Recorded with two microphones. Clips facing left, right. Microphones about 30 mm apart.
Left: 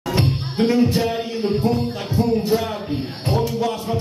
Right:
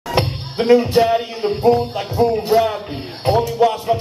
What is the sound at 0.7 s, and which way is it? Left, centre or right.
Speech, right.